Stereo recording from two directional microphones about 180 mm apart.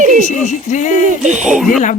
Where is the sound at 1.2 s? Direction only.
40° right (ahead or behind).